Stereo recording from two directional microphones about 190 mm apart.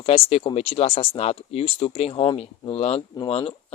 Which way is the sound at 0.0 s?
30° left (ahead or behind).